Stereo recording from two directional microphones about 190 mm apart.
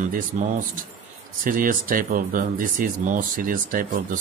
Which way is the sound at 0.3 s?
45° right (ahead or behind).